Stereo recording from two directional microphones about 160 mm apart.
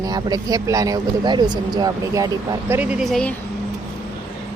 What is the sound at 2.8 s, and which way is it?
Speech, 5° right (ahead or behind).